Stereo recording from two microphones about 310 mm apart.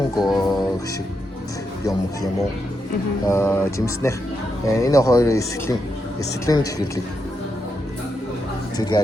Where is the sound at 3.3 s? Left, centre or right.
Centre.